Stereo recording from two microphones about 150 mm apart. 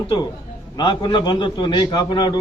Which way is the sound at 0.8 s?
30° left (ahead or behind).